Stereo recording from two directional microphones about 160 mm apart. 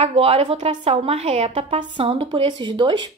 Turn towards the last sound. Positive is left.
turn(degrees=-30)  # may be behind; listen again after turning